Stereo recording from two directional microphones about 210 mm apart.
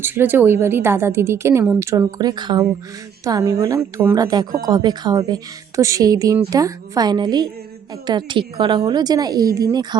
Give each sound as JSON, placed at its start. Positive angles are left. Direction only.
{"t": 0.0, "sound": "a woman's voice", "side_deg": -10}